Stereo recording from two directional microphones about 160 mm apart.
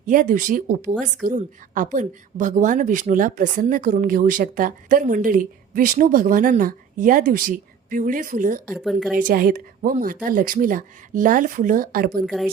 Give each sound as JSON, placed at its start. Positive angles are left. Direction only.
{"t": 0.0, "sound": "a woman's voice", "side_deg": -55}
{"t": 8.8, "sound": "a woman's voice", "side_deg": 0}
{"t": 9.1, "sound": "a woman's voice", "side_deg": -60}
{"t": 12.2, "sound": "a woman's voice", "side_deg": 0}